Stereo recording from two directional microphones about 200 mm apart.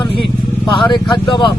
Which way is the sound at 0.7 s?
25° left (ahead or behind).